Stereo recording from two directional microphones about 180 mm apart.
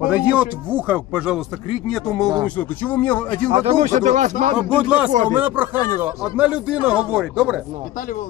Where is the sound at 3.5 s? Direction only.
35° right (ahead or behind).